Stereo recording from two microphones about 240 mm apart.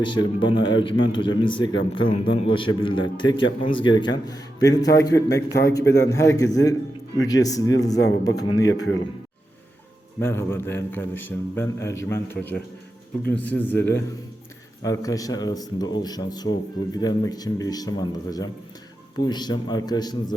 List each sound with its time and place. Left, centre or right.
0.0 s a man's voice: centre
10.2 s a man's voice: centre